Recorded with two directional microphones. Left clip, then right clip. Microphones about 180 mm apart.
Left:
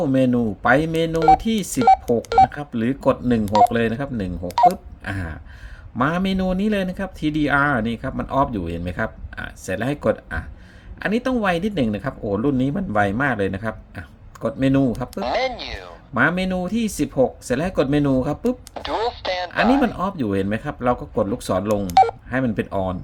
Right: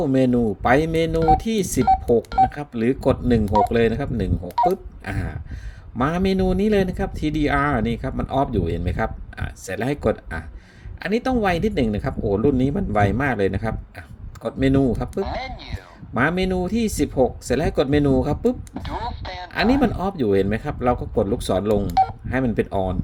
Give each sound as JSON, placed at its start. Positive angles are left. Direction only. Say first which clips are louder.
{"t": 0.0, "sound": "speech", "louder": "even", "side_deg": -5}
{"t": 15.2, "sound": "speech", "louder": "left 6 dB", "side_deg": 30}
{"t": 16.1, "sound": "speech", "louder": "left 1 dB", "side_deg": -5}
{"t": 18.7, "sound": "speech", "louder": "left 6 dB", "side_deg": 30}
{"t": 19.8, "sound": "speech", "louder": "even", "side_deg": -10}